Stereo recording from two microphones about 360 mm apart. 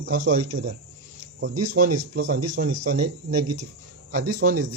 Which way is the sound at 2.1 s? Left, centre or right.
Right.